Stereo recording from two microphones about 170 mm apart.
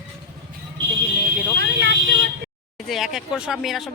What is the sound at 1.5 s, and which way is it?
Speech, 90° right.